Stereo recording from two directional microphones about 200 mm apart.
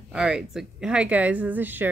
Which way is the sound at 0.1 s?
5° right (ahead or behind).